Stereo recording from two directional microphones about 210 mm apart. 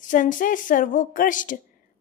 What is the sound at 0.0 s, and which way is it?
A woman's voice, 40° left (ahead or behind).